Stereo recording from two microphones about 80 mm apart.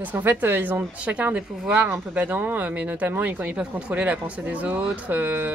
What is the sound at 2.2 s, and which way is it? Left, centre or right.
Speech, right.